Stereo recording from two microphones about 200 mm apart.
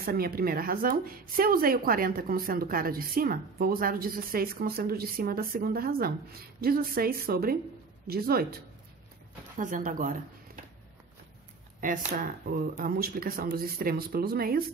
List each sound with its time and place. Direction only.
0.0 s speech: 50° right (ahead or behind)
9.6 s speech: 40° right (ahead or behind)
11.8 s speech: 45° right (ahead or behind)